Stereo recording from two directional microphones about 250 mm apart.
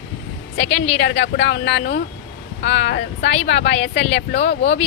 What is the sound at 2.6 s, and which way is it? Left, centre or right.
Speech, left.